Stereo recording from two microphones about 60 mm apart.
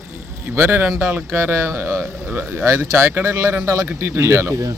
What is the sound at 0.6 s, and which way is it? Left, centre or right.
A man's voice, right.